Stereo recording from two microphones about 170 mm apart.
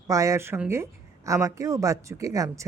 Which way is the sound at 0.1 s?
20° right (ahead or behind).